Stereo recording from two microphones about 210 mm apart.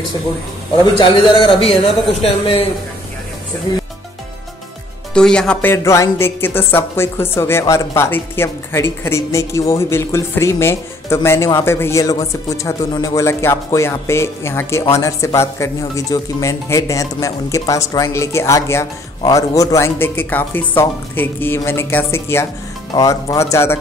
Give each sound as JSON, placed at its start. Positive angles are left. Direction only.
{"t": 0.9, "sound": "a man's voice", "side_deg": 25}
{"t": 3.7, "sound": "a man's voice", "side_deg": 20}
{"t": 5.1, "sound": "speech", "side_deg": 5}